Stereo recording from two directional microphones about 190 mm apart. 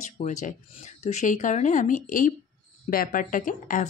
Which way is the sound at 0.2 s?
40° left (ahead or behind).